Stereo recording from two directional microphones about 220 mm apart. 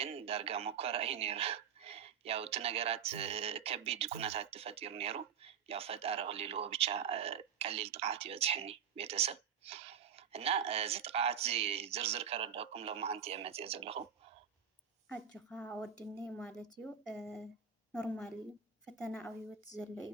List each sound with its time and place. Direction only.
0.0 s speech: 25° right (ahead or behind)
15.1 s speech: 5° left (ahead or behind)